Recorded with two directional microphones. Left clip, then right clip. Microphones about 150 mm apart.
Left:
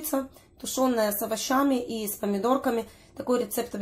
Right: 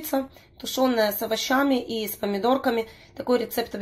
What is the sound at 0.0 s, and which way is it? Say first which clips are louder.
Speech: right 3 dB; centre (ahead or behind).